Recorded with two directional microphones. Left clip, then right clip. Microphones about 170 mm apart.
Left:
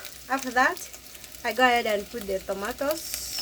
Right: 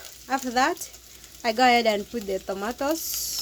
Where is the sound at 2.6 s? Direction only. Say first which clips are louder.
Right 1 dB; 75° right (ahead or behind).